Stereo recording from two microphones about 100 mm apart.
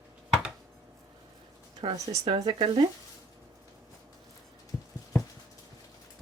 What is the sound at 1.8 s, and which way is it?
Speech, 65° right (ahead or behind).